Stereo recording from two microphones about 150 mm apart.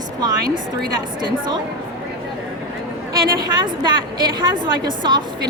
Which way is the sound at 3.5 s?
30° right (ahead or behind).